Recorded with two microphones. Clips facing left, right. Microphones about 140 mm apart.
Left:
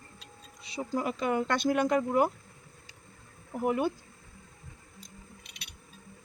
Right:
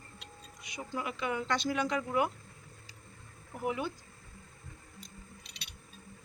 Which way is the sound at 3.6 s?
50° left (ahead or behind).